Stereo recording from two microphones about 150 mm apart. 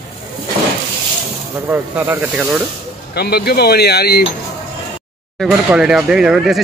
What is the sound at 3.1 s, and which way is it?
Speech, 90° left.